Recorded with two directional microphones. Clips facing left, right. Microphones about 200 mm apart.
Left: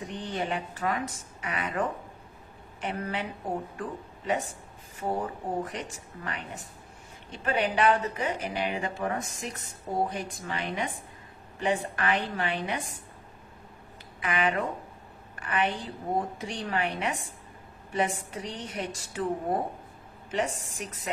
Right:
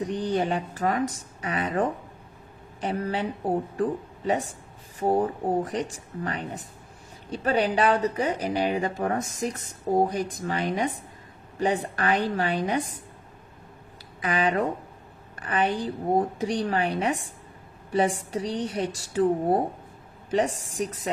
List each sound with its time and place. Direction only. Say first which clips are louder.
0.0 s speech: right 7 dB; 40° right (ahead or behind)
14.2 s speech: right 4 dB; 35° right (ahead or behind)